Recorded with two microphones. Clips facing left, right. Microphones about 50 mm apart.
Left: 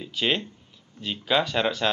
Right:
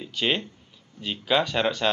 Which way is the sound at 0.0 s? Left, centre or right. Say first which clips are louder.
Even; centre.